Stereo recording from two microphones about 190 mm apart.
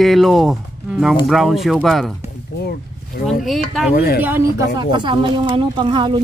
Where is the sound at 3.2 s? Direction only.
Centre (ahead or behind).